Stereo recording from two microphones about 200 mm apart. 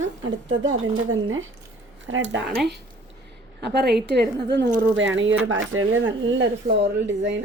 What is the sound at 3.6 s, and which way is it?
A woman's voice, 55° right (ahead or behind).